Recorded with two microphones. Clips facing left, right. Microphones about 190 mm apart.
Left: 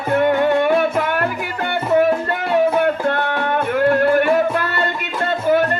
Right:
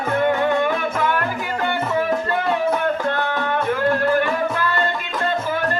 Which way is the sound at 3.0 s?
55° left (ahead or behind).